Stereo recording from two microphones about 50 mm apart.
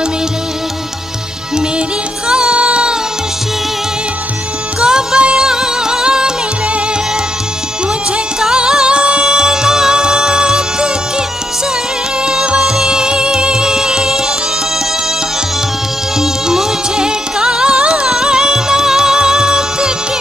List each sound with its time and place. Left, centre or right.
2.2 s music: centre
4.7 s music: centre
8.4 s music: centre
16.2 s music: centre